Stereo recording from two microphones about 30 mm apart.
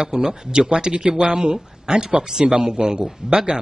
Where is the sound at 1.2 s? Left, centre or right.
Right.